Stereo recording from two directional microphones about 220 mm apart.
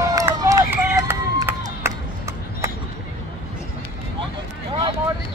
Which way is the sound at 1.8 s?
15° right (ahead or behind).